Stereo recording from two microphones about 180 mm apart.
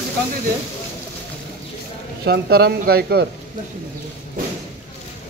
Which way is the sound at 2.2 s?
65° right (ahead or behind).